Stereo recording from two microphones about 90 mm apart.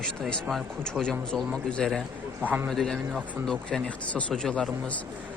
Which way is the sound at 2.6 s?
5° left (ahead or behind).